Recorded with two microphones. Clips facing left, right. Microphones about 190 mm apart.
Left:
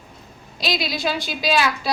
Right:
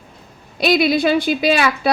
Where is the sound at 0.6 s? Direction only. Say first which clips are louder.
Right 10 dB; 60° right (ahead or behind).